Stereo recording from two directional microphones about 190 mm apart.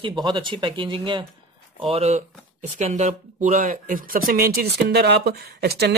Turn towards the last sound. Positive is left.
turn(degrees=-55)  # may be behind; listen again after turning